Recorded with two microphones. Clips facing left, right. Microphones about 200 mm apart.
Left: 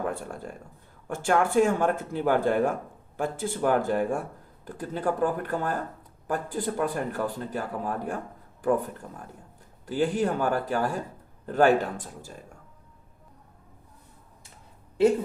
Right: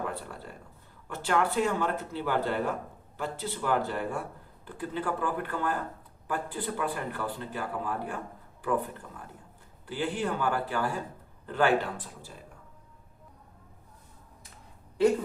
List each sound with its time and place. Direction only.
0.0 s speech: 45° left (ahead or behind)